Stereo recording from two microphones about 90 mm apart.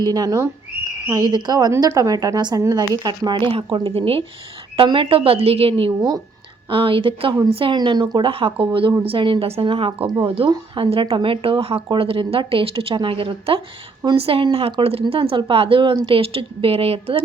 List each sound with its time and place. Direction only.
0.0 s a woman's voice: 45° right (ahead or behind); by 4.2 s 90° right
4.9 s a woman's voice: 75° right (ahead or behind)
6.0 s a woman's voice: 45° right (ahead or behind)
6.7 s speech: 70° right (ahead or behind)
7.6 s a woman's voice: 65° right (ahead or behind); by 10.1 s 90° right
10.2 s speech: 65° right (ahead or behind)
10.8 s a woman's voice: 85° right